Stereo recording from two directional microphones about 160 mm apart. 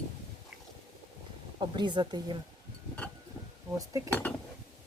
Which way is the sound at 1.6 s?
30° right (ahead or behind).